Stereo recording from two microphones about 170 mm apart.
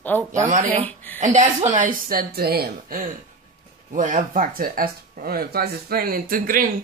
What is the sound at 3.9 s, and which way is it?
Speech, 50° right (ahead or behind).